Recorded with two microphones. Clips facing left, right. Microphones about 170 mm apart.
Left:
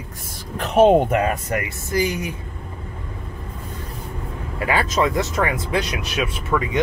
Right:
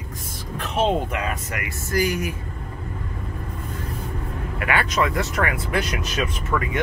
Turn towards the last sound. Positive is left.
turn(degrees=15)  # may be behind; listen again after turning